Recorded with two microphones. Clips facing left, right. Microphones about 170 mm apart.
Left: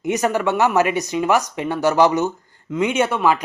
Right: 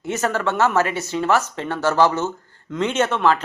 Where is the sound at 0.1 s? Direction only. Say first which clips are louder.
Left 3 dB; 15° left (ahead or behind).